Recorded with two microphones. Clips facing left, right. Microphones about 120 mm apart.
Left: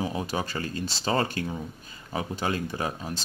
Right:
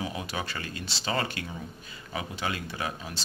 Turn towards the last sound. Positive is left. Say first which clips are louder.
# left 4 dB
turn(degrees=40)  # may be behind; listen again after turning